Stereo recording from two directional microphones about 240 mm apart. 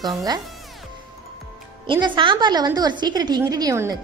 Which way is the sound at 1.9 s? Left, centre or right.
Centre.